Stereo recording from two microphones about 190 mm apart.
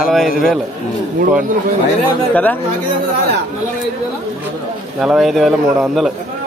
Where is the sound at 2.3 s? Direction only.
10° left (ahead or behind).